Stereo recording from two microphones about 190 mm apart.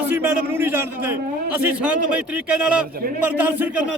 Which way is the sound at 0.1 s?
10° right (ahead or behind).